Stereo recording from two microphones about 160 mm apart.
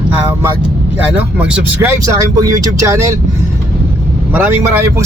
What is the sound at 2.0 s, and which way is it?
Speech, 20° right (ahead or behind).